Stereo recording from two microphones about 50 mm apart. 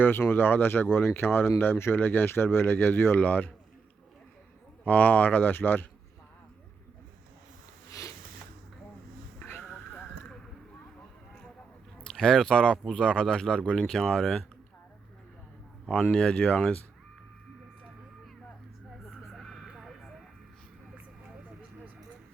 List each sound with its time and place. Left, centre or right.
0.0 s speech: left
3.2 s speech: left
4.8 s speech: left
7.9 s a sound: left
12.0 s speech: centre
16.1 s speech: centre
19.3 s vehicle: centre